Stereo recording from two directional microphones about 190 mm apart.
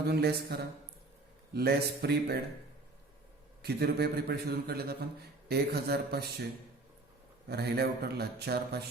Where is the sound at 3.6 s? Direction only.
55° right (ahead or behind).